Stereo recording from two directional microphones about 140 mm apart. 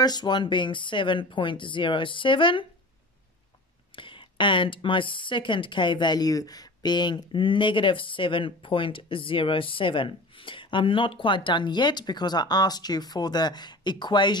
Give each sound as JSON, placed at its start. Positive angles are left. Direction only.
{"t": 0.0, "sound": "speech", "side_deg": 30}
{"t": 3.9, "sound": "speech", "side_deg": 35}